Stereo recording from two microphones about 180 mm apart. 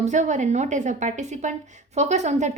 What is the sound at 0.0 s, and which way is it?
A woman's voice, 40° right (ahead or behind).